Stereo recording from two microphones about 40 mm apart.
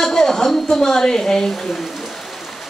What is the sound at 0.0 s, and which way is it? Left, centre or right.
A man's voice, centre.